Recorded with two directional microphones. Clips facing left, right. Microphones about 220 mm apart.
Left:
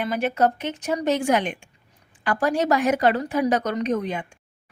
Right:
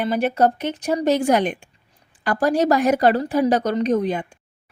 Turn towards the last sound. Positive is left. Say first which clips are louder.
# right 5 dB
turn(degrees=-35)  # may be behind; listen again after turning